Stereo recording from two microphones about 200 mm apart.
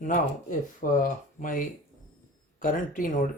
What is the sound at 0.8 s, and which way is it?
Speech, 40° left (ahead or behind).